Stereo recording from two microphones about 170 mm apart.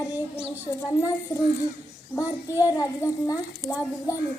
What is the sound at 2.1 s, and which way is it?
A child's voice, 20° left (ahead or behind).